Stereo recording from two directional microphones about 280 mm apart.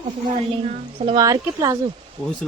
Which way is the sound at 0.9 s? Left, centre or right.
Centre.